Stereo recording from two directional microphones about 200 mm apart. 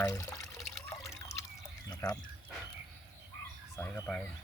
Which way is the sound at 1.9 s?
20° left (ahead or behind).